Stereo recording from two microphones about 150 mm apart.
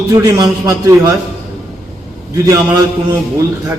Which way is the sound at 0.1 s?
25° right (ahead or behind).